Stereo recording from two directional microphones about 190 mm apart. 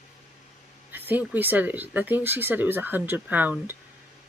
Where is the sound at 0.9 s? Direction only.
10° right (ahead or behind).